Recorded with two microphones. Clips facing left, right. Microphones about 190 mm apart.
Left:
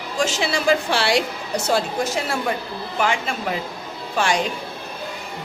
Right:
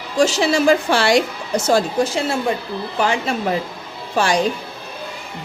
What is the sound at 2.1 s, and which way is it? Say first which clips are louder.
Speech: right 4 dB; 25° right (ahead or behind).